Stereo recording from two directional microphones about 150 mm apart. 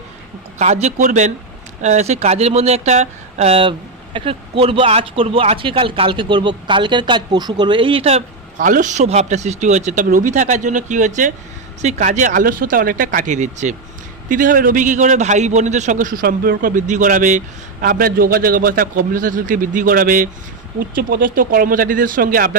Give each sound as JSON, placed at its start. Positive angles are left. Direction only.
{"t": 0.6, "sound": "a man's voice", "side_deg": -50}
{"t": 8.6, "sound": "a man's voice", "side_deg": -60}
{"t": 14.3, "sound": "a man's voice", "side_deg": -65}